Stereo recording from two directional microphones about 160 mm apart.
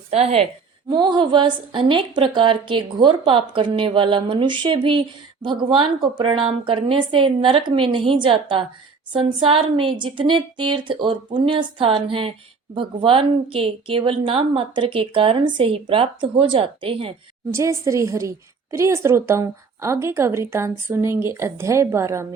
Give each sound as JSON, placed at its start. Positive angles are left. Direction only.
{"t": 0.1, "sound": "a woman's voice", "side_deg": -40}
{"t": 0.9, "sound": "a woman's voice", "side_deg": -30}
{"t": 17.5, "sound": "a woman's voice", "side_deg": -15}